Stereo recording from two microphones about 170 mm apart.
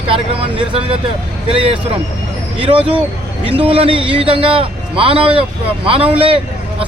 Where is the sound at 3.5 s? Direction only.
30° right (ahead or behind).